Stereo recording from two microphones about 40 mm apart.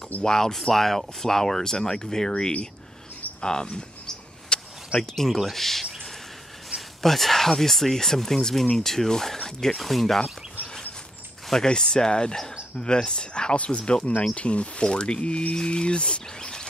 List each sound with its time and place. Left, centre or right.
0.2 s speech: centre
3.3 s speech: centre
4.5 s a sound: left
4.9 s speech: centre
7.0 s speech: centre
9.8 s speech: centre
11.6 s speech: centre